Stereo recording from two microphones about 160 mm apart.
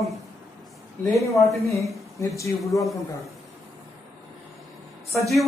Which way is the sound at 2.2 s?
20° left (ahead or behind).